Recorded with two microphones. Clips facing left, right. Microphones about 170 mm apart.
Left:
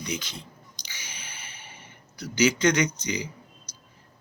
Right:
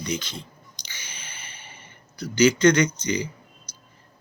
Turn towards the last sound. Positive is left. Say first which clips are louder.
# right 4 dB
turn(degrees=10)  # may be behind; listen again after turning